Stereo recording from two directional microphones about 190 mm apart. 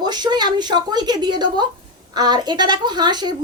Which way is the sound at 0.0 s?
20° right (ahead or behind).